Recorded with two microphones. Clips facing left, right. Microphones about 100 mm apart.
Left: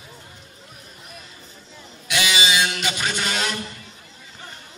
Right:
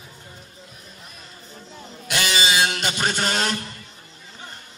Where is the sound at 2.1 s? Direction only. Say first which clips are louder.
Even; 45° right (ahead or behind).